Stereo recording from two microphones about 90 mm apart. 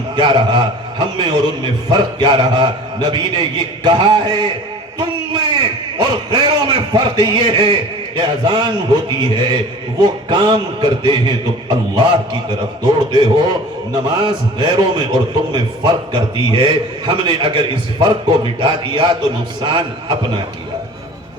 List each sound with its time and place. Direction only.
0.2 s a man's voice: 60° right (ahead or behind)
4.9 s a sound: 60° right (ahead or behind)
6.0 s a man's voice: 55° right (ahead or behind)